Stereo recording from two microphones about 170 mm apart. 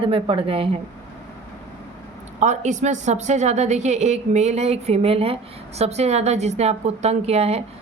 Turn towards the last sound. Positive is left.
turn(degrees=-40)  # may be behind; listen again after turning